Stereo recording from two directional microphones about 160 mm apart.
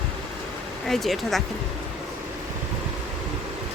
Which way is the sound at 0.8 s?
Centre (ahead or behind).